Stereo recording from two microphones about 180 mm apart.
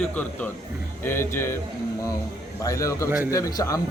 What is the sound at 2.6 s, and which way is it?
Speech, 15° left (ahead or behind).